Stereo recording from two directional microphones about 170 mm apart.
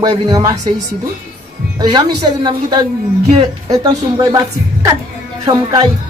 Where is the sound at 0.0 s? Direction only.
20° right (ahead or behind).